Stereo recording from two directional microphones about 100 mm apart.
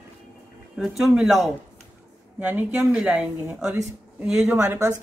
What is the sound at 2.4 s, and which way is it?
Speech, 15° right (ahead or behind).